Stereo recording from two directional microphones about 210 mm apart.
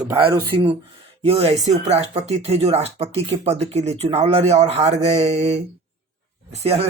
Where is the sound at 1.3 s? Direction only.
30° right (ahead or behind).